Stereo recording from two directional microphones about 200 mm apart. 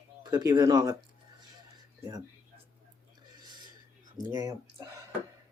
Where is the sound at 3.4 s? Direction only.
20° right (ahead or behind).